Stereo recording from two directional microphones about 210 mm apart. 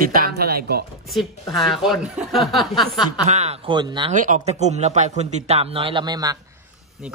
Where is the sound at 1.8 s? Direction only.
Centre (ahead or behind).